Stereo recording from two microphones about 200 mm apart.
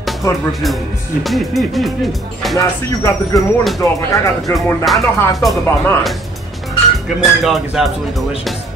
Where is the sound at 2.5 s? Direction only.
15° left (ahead or behind).